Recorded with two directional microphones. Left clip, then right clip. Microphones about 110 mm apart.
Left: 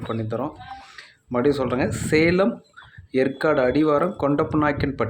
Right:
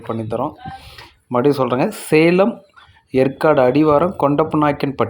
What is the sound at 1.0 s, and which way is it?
Speech, 30° right (ahead or behind).